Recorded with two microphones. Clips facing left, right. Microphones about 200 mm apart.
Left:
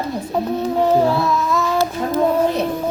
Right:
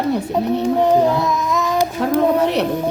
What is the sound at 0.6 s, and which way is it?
Child singing, 15° right (ahead or behind).